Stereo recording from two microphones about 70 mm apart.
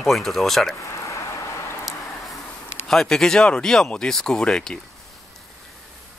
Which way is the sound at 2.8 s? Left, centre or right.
Centre.